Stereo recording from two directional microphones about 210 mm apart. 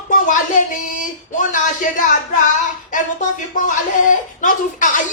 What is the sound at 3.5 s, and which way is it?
Speech, 40° left (ahead or behind).